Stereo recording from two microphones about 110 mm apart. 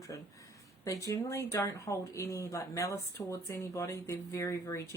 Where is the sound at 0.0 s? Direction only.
30° left (ahead or behind).